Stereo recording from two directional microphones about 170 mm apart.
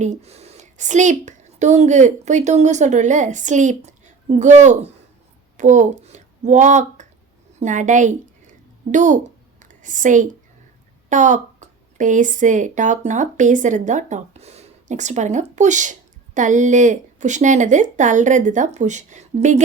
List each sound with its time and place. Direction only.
0.0 s a woman's voice: 40° right (ahead or behind)